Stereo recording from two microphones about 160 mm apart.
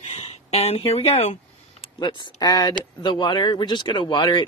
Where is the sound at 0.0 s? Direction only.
40° left (ahead or behind).